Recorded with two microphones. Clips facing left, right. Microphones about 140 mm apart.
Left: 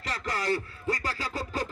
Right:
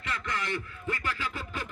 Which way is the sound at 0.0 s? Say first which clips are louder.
Left 3 dB; 35° left (ahead or behind).